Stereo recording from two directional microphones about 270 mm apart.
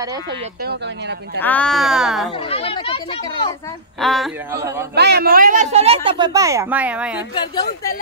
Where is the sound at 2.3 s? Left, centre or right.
Centre.